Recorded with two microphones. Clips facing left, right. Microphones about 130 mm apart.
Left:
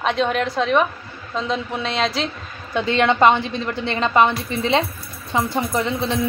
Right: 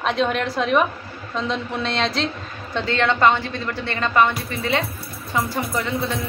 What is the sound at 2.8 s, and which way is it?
A woman's voice, 15° left (ahead or behind).